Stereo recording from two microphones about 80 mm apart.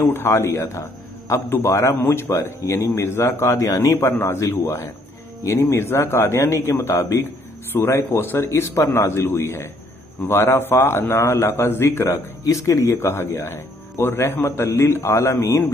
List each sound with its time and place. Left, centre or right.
0.1 s a man's voice: left
2.9 s a man's voice: left
3.9 s a man's voice: left